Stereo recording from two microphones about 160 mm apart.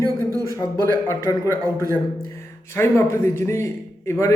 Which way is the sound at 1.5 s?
20° right (ahead or behind).